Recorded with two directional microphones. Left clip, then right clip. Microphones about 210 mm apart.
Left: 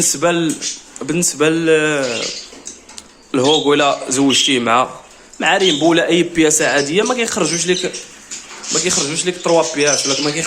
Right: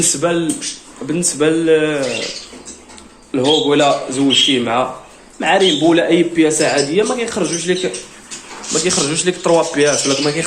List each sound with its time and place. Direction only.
0.1 s a man's voice: 30° left (ahead or behind)
3.3 s a man's voice: 30° left (ahead or behind)
8.8 s speech: 10° left (ahead or behind)